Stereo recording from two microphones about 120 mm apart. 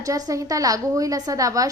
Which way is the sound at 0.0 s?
30° right (ahead or behind).